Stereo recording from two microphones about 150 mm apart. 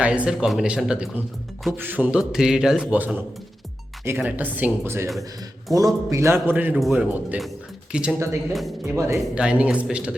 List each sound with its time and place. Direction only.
0.0 s a man's voice: 5° right (ahead or behind)
9.3 s speech: 5° right (ahead or behind)